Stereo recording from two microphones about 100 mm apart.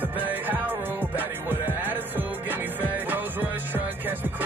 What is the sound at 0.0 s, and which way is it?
Music, 20° right (ahead or behind).